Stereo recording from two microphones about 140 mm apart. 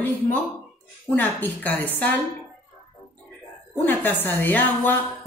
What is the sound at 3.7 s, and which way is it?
Speech, 15° left (ahead or behind).